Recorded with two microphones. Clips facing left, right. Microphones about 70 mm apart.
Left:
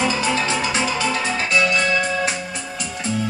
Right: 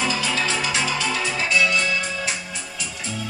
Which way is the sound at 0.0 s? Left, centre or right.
Left.